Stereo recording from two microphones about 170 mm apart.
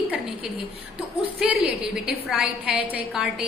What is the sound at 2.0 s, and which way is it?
A woman's voice, 5° right (ahead or behind).